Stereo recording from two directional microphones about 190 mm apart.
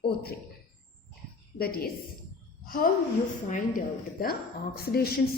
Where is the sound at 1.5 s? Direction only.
55° left (ahead or behind).